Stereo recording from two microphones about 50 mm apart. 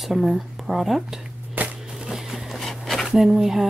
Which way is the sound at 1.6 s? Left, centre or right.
Right.